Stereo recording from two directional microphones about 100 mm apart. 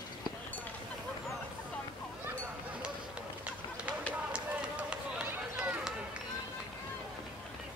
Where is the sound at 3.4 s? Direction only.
10° right (ahead or behind).